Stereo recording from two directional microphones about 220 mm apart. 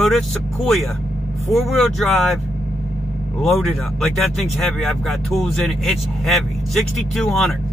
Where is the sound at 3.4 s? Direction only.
Centre (ahead or behind).